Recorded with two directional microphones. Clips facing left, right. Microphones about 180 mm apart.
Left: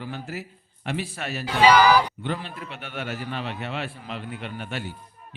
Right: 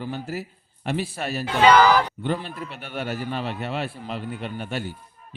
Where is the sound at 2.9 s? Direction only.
40° right (ahead or behind).